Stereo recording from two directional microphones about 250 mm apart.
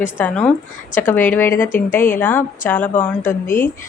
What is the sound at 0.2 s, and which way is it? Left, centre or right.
Speech, centre.